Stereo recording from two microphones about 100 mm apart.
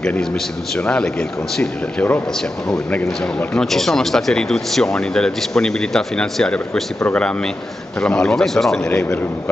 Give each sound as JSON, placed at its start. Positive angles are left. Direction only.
{"t": 0.7, "sound": "a man's voice", "side_deg": 10}
{"t": 3.7, "sound": "a man's voice", "side_deg": 5}